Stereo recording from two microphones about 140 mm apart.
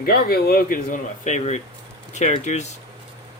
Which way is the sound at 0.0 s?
90° left.